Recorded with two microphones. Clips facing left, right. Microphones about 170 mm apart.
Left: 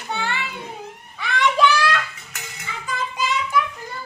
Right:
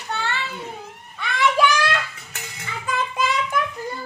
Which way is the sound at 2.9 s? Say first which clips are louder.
Right 2 dB; 55° right (ahead or behind).